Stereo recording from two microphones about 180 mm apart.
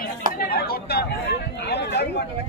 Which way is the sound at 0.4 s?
60° left (ahead or behind).